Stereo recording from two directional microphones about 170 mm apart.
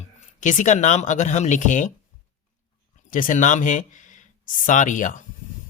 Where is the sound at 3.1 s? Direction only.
50° left (ahead or behind).